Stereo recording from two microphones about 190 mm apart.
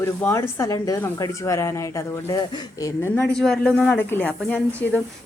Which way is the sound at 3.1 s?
5° left (ahead or behind).